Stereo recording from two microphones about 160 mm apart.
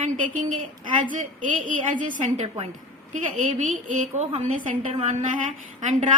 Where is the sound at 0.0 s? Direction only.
55° right (ahead or behind).